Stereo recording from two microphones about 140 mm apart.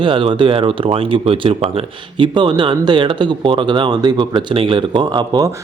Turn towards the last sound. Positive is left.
turn(degrees=-30)  # may be behind; listen again after turning